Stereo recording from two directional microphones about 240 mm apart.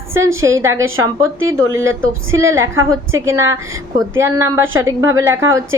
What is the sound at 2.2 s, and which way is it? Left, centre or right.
Speech, right.